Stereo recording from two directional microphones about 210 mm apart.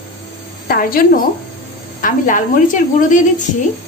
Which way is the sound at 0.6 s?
45° left (ahead or behind).